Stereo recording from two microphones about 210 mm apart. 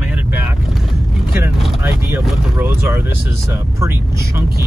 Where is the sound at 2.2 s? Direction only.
5° right (ahead or behind).